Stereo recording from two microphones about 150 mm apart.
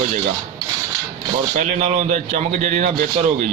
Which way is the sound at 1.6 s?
55° right (ahead or behind).